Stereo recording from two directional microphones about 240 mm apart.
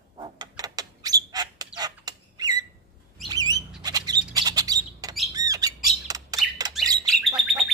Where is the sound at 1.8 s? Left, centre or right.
Centre.